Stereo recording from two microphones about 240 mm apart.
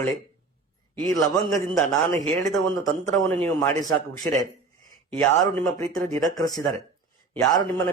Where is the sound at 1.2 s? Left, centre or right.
Centre.